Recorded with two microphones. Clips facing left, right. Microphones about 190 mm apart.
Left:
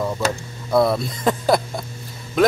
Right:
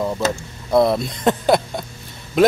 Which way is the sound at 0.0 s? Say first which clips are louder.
Right 1 dB; 15° right (ahead or behind).